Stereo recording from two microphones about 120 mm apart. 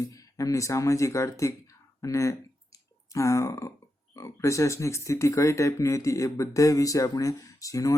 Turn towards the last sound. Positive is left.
turn(degrees=30)  # may be behind; listen again after turning